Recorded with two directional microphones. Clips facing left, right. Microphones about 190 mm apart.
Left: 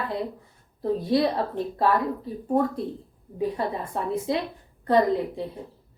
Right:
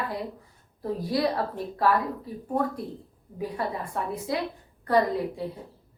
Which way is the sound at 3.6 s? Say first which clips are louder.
Left 2 dB; 25° left (ahead or behind).